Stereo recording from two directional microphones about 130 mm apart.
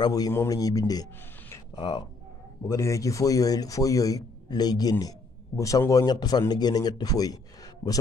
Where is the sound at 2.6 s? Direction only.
20° left (ahead or behind).